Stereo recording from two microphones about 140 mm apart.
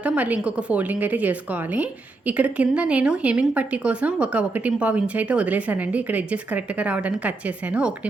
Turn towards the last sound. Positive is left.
turn(degrees=-10)  # may be behind; listen again after turning